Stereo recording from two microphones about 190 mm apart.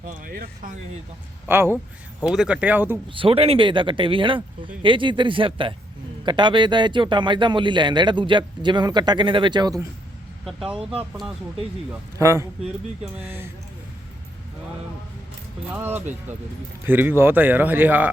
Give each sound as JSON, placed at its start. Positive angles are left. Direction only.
{"t": 0.2, "sound": "speech", "side_deg": -50}
{"t": 1.5, "sound": "speech", "side_deg": -10}
{"t": 3.1, "sound": "speech", "side_deg": -30}
{"t": 11.9, "sound": "speech", "side_deg": -15}
{"t": 15.7, "sound": "speech", "side_deg": -10}